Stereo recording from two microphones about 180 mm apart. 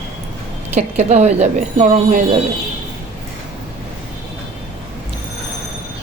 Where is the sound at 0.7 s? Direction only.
40° right (ahead or behind).